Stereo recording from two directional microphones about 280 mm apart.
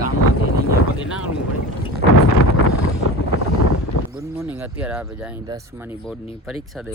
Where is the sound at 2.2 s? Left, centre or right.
Left.